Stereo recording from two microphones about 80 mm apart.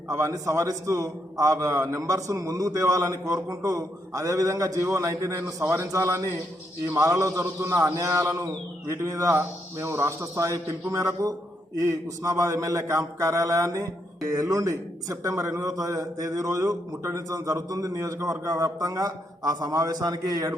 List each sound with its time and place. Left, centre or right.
0.1 s a man's voice: right